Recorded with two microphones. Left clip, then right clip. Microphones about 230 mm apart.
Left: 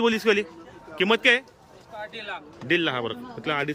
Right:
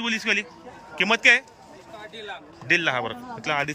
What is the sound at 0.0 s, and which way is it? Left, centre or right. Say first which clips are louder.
A man's voice: left 3 dB; centre.